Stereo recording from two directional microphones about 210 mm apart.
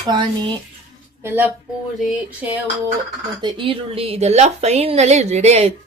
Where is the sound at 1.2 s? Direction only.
10° right (ahead or behind).